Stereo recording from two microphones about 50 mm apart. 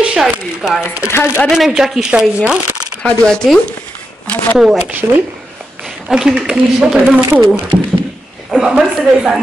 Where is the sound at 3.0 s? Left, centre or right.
Centre.